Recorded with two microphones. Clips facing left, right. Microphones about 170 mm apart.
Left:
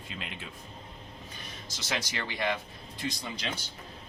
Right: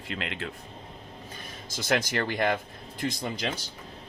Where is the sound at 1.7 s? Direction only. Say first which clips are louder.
Right 8 dB; 50° right (ahead or behind).